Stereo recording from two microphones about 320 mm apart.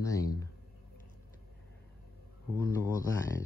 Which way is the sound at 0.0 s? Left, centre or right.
Centre.